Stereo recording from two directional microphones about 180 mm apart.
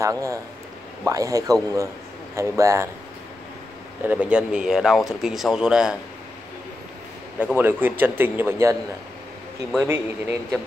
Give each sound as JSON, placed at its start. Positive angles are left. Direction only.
{"t": 0.0, "sound": "speech", "side_deg": -15}
{"t": 4.0, "sound": "speech", "side_deg": -10}
{"t": 7.5, "sound": "speech", "side_deg": -10}
{"t": 9.8, "sound": "speech", "side_deg": -10}